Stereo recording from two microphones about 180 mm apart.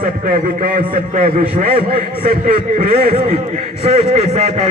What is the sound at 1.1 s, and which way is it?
Speech, 35° right (ahead or behind).